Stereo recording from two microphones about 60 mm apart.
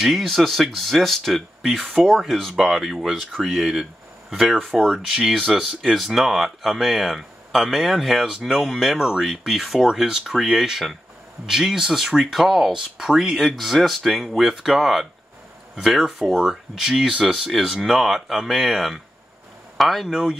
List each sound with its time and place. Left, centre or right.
0.0 s speech: centre